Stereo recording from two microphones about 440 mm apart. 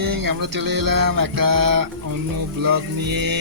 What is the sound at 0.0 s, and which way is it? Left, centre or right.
Speech, right.